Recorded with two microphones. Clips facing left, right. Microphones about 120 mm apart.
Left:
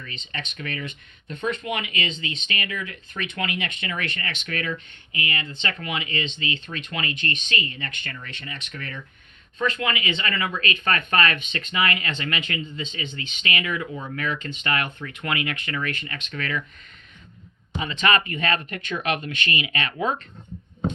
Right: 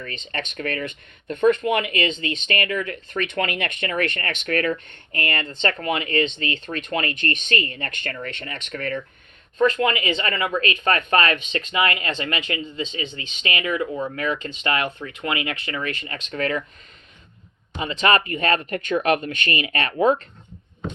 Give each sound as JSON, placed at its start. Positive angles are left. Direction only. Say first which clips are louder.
{"t": 0.0, "sound": "speech", "louder": "right 5 dB", "side_deg": -50}
{"t": 17.7, "sound": "speech", "louder": "right 3 dB", "side_deg": -35}